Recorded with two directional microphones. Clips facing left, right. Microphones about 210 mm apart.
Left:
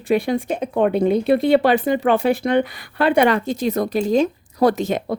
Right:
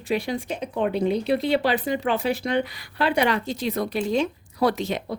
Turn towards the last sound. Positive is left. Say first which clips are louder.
# left 5 dB
turn(degrees=50)  # may be behind; listen again after turning